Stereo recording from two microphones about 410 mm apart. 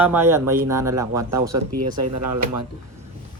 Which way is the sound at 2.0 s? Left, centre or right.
Right.